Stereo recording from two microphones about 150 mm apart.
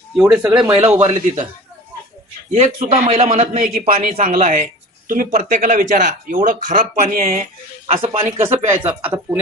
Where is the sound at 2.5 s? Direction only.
45° right (ahead or behind); by 3.9 s 65° right (ahead or behind).